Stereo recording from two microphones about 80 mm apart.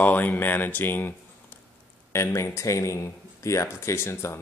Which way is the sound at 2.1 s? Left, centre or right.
Left.